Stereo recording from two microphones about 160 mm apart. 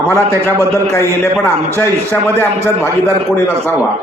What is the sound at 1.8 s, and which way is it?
Speech, 15° left (ahead or behind).